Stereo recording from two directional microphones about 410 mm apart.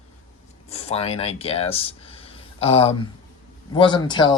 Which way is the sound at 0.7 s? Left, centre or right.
Centre.